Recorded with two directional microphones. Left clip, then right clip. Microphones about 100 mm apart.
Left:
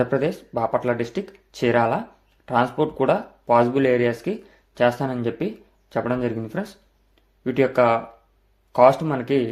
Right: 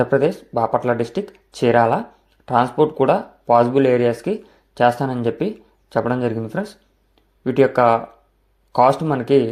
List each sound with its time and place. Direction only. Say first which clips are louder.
0.0 s speech: right 5 dB; 30° right (ahead or behind)